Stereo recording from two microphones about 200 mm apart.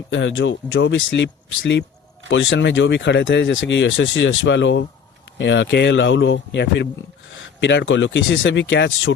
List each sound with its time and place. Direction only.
0.1 s speech: 70° left (ahead or behind)